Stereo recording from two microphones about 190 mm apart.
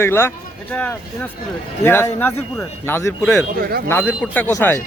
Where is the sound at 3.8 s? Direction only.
10° left (ahead or behind).